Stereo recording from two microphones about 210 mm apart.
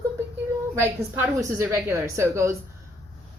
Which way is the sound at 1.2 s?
15° right (ahead or behind).